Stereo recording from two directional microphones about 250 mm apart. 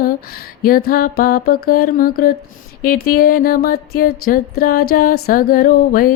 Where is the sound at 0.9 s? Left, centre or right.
Left.